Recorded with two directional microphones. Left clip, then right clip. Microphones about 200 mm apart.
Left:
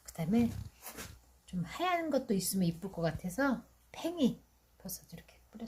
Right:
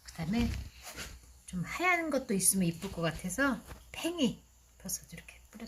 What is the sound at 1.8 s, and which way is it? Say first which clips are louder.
Speech: right 2 dB; 5° left (ahead or behind).